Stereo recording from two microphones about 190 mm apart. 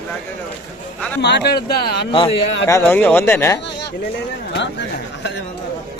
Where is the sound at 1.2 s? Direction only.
60° left (ahead or behind).